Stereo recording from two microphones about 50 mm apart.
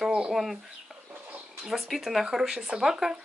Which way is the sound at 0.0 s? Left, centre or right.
Centre.